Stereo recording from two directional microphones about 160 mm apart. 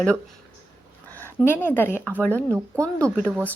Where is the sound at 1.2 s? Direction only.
15° left (ahead or behind).